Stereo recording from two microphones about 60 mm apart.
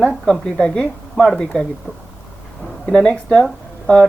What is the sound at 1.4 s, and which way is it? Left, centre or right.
Speech, centre.